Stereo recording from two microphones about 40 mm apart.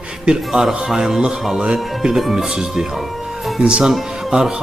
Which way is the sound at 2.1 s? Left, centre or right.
Centre.